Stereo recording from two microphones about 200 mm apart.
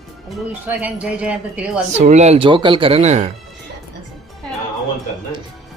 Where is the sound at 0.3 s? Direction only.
10° right (ahead or behind).